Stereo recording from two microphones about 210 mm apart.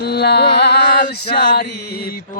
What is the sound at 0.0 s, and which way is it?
Music, 50° left (ahead or behind).